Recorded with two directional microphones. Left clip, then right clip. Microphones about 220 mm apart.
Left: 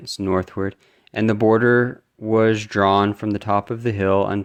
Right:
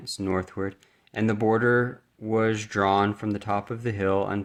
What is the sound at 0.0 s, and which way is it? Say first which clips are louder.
Speech: left 6 dB; 30° left (ahead or behind).